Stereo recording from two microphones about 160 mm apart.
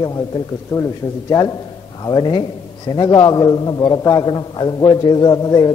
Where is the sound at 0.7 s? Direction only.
20° left (ahead or behind).